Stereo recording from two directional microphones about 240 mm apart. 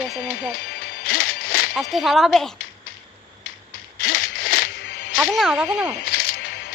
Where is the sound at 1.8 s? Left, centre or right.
Centre.